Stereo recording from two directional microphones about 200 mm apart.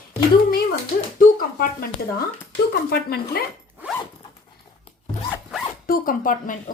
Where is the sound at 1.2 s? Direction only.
45° left (ahead or behind).